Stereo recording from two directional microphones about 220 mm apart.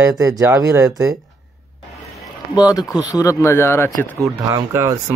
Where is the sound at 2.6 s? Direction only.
15° left (ahead or behind).